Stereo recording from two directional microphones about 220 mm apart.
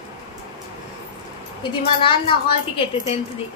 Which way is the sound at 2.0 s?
25° left (ahead or behind).